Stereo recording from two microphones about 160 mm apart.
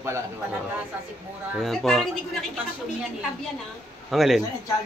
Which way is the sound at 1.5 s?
Centre (ahead or behind).